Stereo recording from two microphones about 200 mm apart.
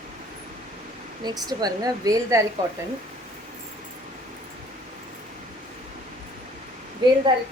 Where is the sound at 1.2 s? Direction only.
20° right (ahead or behind).